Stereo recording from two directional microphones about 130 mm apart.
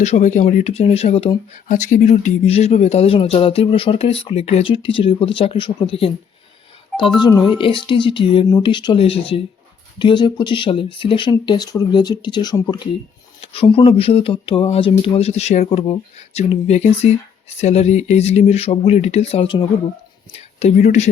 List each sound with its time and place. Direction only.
0.0 s speech: 65° left (ahead or behind)
1.6 s speech: 75° left (ahead or behind); by 6.1 s 45° left (ahead or behind)
7.2 s speech: 30° left (ahead or behind)
7.5 s speech: 40° left (ahead or behind)
10.0 s speech: 35° left (ahead or behind)
13.4 s speech: 45° left (ahead or behind)
20.3 s speech: 55° left (ahead or behind)